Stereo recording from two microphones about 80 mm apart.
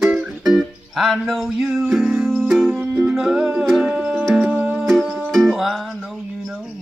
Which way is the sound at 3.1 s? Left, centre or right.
Centre.